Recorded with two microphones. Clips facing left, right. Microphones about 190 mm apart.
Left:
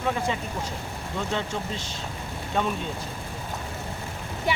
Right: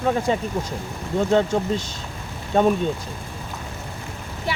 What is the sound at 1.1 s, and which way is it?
Speech, 45° right (ahead or behind).